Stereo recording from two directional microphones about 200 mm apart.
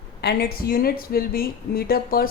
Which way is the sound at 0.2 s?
55° left (ahead or behind).